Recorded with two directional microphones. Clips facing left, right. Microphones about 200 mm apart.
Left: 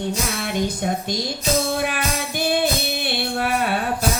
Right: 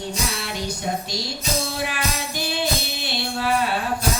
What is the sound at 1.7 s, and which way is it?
Music, 55° left (ahead or behind).